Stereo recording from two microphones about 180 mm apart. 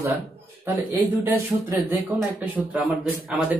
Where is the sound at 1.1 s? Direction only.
10° right (ahead or behind).